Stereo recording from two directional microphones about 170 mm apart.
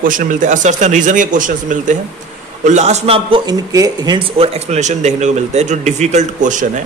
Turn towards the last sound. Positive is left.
turn(degrees=-45)  # may be behind; listen again after turning